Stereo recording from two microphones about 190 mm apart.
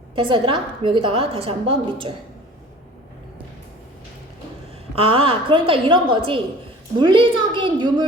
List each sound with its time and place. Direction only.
0.2 s a woman's voice: 30° right (ahead or behind)
4.9 s a woman's voice: 30° right (ahead or behind)